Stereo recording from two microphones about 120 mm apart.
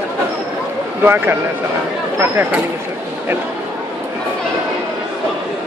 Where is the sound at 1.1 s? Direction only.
15° right (ahead or behind).